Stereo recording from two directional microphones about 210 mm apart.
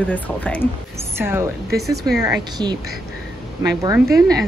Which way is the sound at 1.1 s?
10° right (ahead or behind).